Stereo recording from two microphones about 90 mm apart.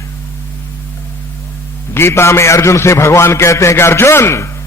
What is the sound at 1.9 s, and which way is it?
A man's voice, 30° left (ahead or behind).